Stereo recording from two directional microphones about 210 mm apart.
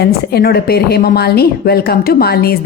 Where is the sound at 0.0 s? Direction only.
50° left (ahead or behind).